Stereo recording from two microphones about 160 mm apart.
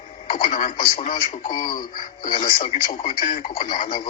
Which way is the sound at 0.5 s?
50° left (ahead or behind).